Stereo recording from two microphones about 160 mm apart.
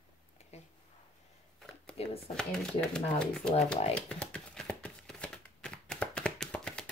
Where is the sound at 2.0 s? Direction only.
35° left (ahead or behind).